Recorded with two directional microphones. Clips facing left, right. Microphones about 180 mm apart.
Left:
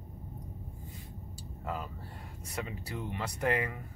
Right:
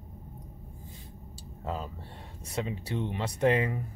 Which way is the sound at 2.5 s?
25° right (ahead or behind).